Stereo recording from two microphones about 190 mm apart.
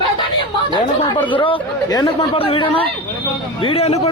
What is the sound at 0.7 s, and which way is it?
A man's voice, 25° left (ahead or behind).